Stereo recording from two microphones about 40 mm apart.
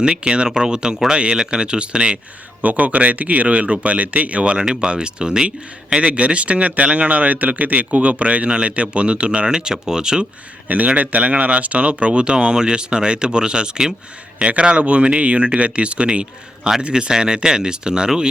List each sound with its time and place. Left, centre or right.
0.0 s speech: right
2.6 s speech: right
4.6 s speech: centre
10.7 s speech: right; by 18.3 s centre